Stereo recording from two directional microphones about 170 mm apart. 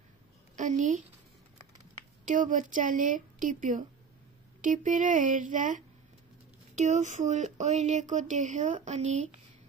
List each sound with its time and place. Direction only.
0.6 s a woman's voice: 45° right (ahead or behind)
2.2 s speech: 50° right (ahead or behind)